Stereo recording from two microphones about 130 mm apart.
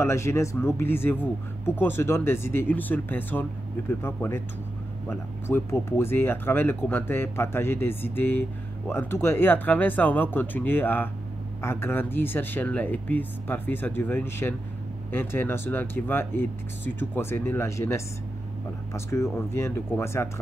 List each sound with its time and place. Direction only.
0.0 s speech: 20° left (ahead or behind)
5.5 s speech: 20° left (ahead or behind)